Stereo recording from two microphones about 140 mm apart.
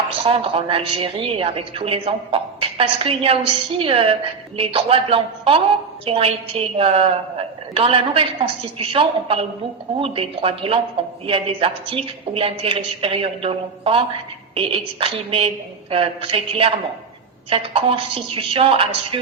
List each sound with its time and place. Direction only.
0.1 s a woman's voice: 40° right (ahead or behind)